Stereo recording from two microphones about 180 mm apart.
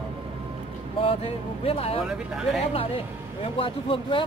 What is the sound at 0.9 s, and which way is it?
Speech, 30° left (ahead or behind).